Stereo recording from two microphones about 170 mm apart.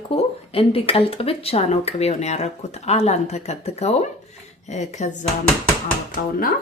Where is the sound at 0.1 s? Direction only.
35° left (ahead or behind).